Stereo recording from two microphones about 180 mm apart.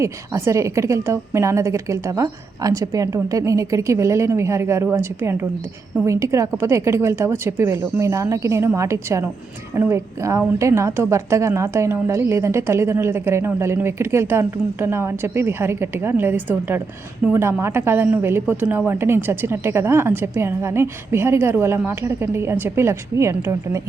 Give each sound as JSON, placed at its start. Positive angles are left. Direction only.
{"t": 0.0, "sound": "a woman's voice", "side_deg": -15}